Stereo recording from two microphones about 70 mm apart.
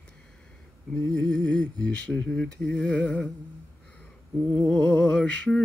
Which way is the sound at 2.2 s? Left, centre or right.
Centre.